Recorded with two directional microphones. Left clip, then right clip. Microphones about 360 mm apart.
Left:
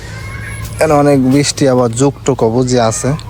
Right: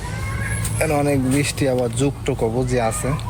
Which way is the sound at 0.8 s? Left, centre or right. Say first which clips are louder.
Left 10 dB; left.